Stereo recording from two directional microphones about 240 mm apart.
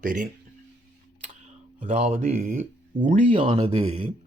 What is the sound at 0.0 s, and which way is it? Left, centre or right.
Speech, right.